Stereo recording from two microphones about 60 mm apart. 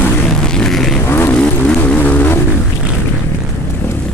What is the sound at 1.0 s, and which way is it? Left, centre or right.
Vehicle, left.